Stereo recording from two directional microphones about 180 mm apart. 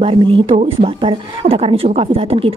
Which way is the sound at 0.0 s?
30° right (ahead or behind).